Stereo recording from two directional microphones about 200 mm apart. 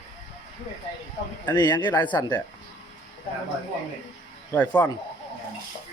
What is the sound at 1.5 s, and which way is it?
Speech, 20° left (ahead or behind).